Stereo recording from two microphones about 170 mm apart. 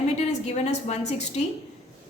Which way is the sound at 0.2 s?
40° left (ahead or behind).